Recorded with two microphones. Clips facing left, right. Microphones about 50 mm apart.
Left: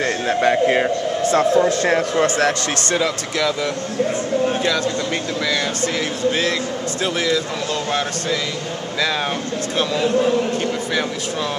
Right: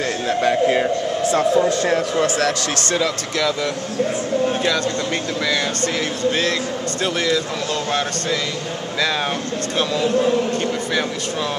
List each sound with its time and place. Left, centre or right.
0.0 s a sound: left
1.3 s a man's voice: left
2.1 s a man's voice: left
3.0 s speech: centre
5.4 s speech: centre